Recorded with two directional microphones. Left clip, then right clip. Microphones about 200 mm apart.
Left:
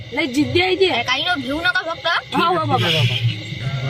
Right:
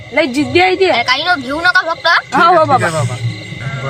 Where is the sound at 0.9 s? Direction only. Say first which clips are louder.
Right 6 dB; 15° left (ahead or behind).